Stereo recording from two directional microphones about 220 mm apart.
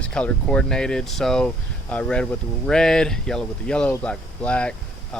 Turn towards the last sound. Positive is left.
turn(degrees=5)  # may be behind; listen again after turning